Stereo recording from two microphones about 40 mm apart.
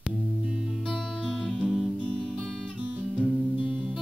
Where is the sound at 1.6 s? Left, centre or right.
Centre.